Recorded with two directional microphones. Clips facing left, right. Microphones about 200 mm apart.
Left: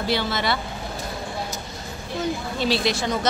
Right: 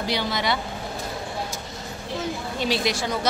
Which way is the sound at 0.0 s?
15° right (ahead or behind).